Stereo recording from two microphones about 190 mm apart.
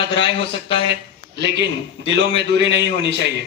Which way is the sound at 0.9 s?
65° right (ahead or behind).